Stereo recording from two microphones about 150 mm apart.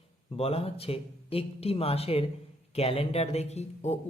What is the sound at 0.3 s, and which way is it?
Speech, 40° left (ahead or behind).